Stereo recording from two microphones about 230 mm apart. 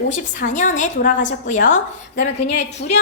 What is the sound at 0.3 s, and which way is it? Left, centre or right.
A woman's voice, left.